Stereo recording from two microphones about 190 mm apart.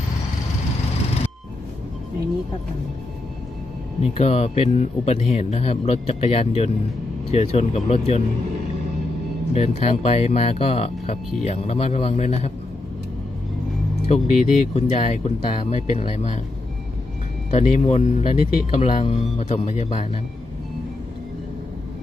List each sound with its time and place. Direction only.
4.2 s speech: 35° left (ahead or behind)
9.6 s speech: 35° left (ahead or behind)
14.1 s speech: 35° left (ahead or behind)
17.5 s speech: 35° left (ahead or behind)